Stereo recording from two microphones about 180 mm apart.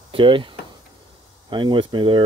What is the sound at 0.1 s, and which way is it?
Speech, 30° right (ahead or behind).